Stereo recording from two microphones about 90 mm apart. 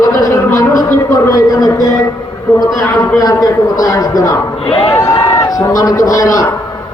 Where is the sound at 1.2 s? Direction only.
45° left (ahead or behind).